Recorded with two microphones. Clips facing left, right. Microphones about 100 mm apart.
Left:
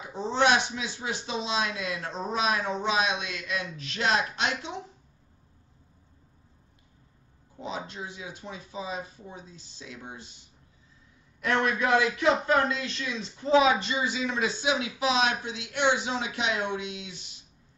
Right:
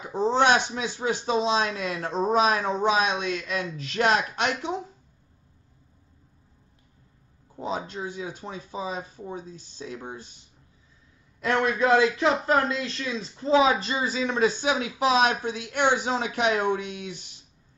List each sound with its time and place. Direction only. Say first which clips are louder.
0.1 s speech: right 3 dB; 45° right (ahead or behind)
7.6 s speech: right 5 dB; 40° right (ahead or behind)
11.4 s speech: right 3 dB; 30° right (ahead or behind); by 17.1 s 45° right (ahead or behind)